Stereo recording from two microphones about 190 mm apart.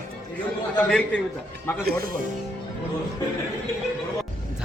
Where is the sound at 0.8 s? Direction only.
5° left (ahead or behind).